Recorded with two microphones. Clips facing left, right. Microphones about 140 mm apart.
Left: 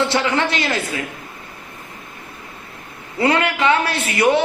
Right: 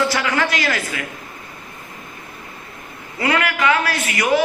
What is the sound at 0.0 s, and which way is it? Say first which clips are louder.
Speech: left 1 dB; 25° left (ahead or behind).